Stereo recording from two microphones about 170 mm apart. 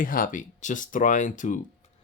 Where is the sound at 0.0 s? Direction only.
55° left (ahead or behind).